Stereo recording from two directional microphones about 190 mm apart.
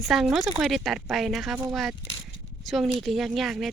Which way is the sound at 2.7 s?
Centre (ahead or behind).